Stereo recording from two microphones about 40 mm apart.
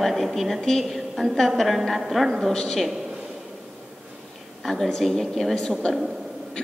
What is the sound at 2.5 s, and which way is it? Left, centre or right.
Speech, centre.